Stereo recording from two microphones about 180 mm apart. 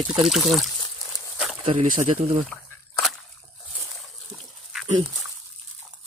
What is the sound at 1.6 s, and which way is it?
Speech, 35° right (ahead or behind).